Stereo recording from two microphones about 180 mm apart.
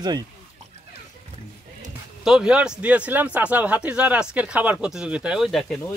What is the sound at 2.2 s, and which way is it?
Speech, 5° right (ahead or behind).